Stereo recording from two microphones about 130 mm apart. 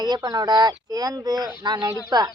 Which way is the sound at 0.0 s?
30° right (ahead or behind).